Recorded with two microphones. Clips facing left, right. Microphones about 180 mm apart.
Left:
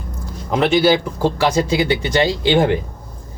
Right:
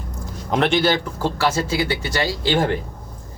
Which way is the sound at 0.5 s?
5° left (ahead or behind).